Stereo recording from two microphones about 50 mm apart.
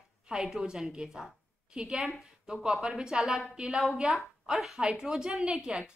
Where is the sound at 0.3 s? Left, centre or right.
Centre.